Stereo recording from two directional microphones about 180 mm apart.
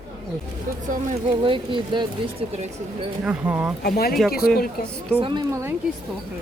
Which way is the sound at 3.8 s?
60° left (ahead or behind).